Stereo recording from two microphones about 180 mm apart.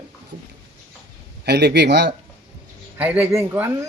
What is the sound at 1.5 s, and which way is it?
Speech, 65° right (ahead or behind).